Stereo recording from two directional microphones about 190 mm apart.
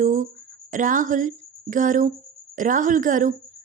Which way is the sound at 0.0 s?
45° right (ahead or behind).